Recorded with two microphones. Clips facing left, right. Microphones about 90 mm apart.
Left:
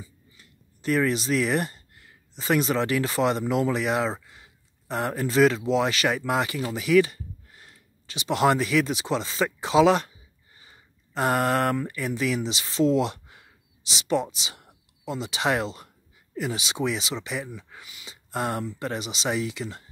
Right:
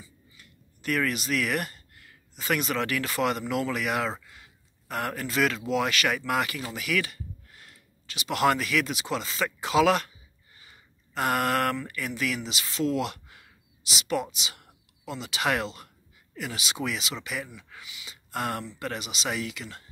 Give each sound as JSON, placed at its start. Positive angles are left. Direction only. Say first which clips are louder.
{"t": 0.0, "sound": "speech", "louder": "left 4 dB", "side_deg": 30}
{"t": 10.6, "sound": "a sound", "louder": "left 1 dB", "side_deg": 30}
{"t": 11.7, "sound": "speech", "louder": "left 5 dB", "side_deg": 30}
{"t": 18.1, "sound": "speech", "louder": "left 3 dB", "side_deg": 30}